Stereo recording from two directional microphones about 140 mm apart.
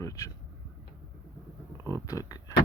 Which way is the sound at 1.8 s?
25° left (ahead or behind).